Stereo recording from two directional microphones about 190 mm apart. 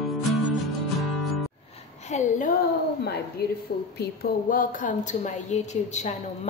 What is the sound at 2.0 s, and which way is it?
Speech, 40° left (ahead or behind).